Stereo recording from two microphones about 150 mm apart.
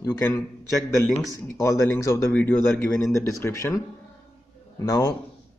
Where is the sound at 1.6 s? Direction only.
20° left (ahead or behind).